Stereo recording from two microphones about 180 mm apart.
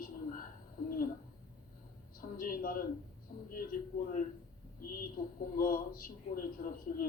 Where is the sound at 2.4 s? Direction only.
50° left (ahead or behind).